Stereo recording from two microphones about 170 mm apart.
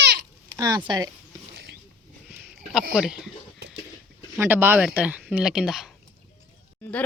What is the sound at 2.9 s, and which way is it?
Speech, 5° right (ahead or behind).